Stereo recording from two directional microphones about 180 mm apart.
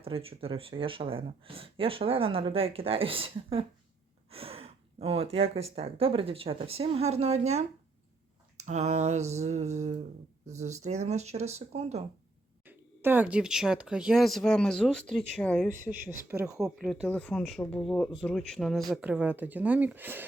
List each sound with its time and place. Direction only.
0.0 s speech: 30° right (ahead or behind)
12.6 s speech: 10° right (ahead or behind); by 15.7 s 5° left (ahead or behind)
16.3 s speech: 15° right (ahead or behind)
16.6 s speech: centre (ahead or behind)